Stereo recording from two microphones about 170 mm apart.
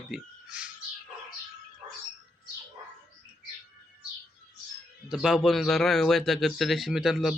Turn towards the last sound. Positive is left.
turn(degrees=0)  # may be behind; listen again after turning